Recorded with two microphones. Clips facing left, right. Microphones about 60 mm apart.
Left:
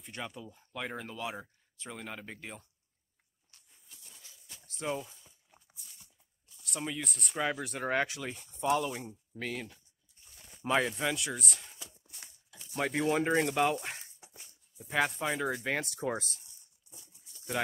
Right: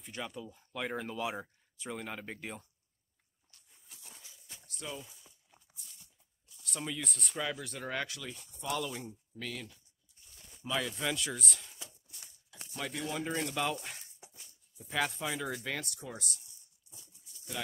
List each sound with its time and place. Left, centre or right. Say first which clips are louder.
0.0 s speech: even; centre
4.2 s a sound: even; centre
4.8 s speech: left 8 dB; left
6.5 s a sound: left 3 dB; centre
7.0 s speech: left 1 dB; centre
7.3 s speech: left 5 dB; left
8.6 s speech: left 6 dB; left
9.4 s speech: left 4 dB; left
10.6 s speech: left 6 dB; left
11.0 s speech: left 2 dB; centre
12.7 s speech: left 8 dB; left
14.9 s speech: left 3 dB; left
15.3 s speech: left 4 dB; centre
15.6 s speech: left 5 dB; left